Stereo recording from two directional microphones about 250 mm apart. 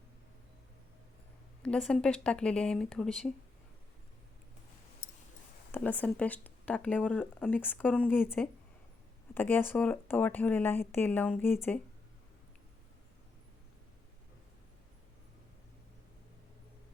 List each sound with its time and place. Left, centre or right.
1.6 s speech: centre
5.7 s speech: centre